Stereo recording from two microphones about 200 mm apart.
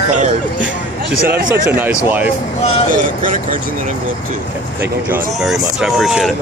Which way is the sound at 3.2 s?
40° right (ahead or behind).